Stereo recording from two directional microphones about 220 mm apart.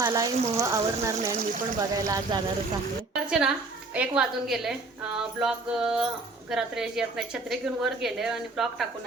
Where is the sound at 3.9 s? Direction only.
5° right (ahead or behind).